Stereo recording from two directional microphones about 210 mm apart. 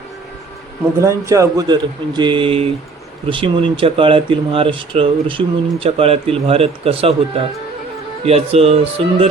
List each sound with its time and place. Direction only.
0.9 s speech: 15° right (ahead or behind)